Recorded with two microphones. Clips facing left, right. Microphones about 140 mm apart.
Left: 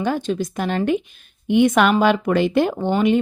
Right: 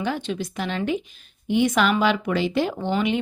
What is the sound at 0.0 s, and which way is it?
A woman's voice, 45° left (ahead or behind).